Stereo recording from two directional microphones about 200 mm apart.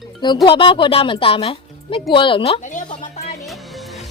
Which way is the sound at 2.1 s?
25° left (ahead or behind).